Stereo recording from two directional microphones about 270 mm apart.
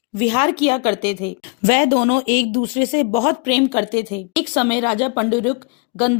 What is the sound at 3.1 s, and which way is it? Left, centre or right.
Speech, centre.